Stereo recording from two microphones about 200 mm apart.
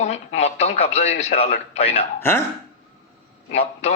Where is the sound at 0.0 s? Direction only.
35° left (ahead or behind).